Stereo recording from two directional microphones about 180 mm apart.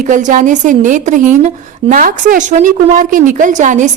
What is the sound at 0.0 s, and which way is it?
A woman's voice, 45° right (ahead or behind).